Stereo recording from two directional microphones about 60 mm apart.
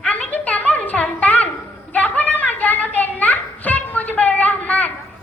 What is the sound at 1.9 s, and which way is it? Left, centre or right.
Children playing, left.